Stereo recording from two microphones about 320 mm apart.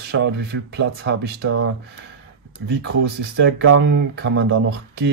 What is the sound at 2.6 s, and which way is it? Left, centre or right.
Speech, right.